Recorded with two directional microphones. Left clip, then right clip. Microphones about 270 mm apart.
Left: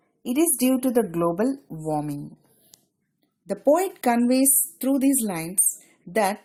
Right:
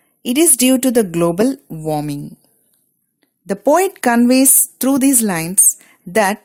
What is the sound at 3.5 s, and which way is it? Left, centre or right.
Speech, right.